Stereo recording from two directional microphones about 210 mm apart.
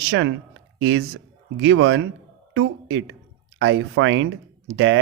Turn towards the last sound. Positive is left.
turn(degrees=-55)  # may be behind; listen again after turning